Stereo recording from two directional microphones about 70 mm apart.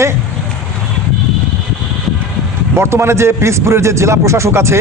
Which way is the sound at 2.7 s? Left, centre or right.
Right.